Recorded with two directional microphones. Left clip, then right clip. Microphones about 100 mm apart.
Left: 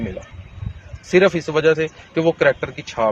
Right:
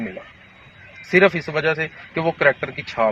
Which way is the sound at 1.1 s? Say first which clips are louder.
Left 1 dB; 25° left (ahead or behind).